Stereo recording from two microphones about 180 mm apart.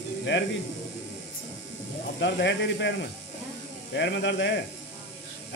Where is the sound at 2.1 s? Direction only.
80° left.